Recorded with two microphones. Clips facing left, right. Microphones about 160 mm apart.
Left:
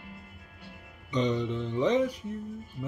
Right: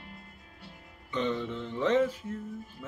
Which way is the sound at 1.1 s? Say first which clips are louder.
Left 3 dB; 15° left (ahead or behind).